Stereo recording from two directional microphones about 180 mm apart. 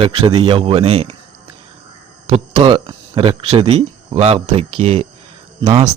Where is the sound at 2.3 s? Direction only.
30° right (ahead or behind).